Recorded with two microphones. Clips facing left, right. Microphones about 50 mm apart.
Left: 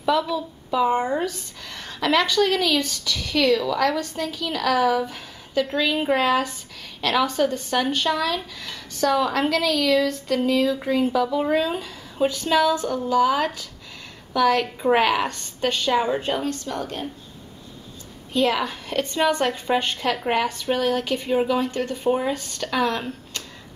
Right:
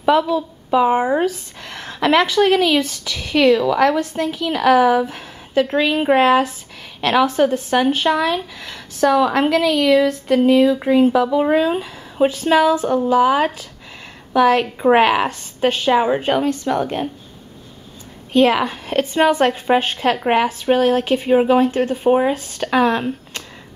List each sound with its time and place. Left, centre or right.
0.0 s a woman's voice: right
0.8 s speech: centre
1.6 s a woman's voice: right
16.3 s a woman's voice: right
16.7 s a woman's voice: right
18.5 s a woman's voice: right
20.9 s speech: right
21.3 s a woman's voice: right
21.7 s speech: centre
22.6 s speech: right